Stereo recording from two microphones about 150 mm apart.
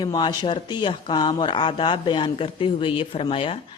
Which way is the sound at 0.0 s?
30° left (ahead or behind).